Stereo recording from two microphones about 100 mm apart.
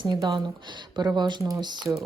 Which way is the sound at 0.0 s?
40° right (ahead or behind).